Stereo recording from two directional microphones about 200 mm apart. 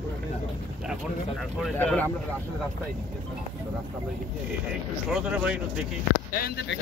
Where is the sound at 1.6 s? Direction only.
5° left (ahead or behind).